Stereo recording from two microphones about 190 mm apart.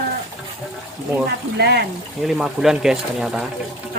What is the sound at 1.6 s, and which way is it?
Speech, 60° right (ahead or behind).